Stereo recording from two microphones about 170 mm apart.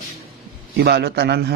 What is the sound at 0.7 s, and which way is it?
Speech, 70° right (ahead or behind).